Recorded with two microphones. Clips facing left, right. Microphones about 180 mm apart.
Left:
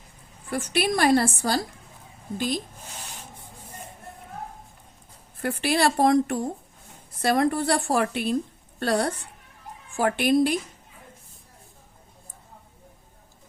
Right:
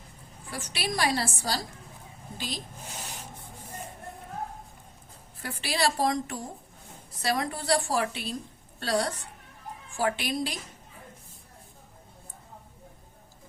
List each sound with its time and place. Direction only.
0.5 s a woman's voice: 55° left (ahead or behind)
5.4 s a woman's voice: 55° left (ahead or behind)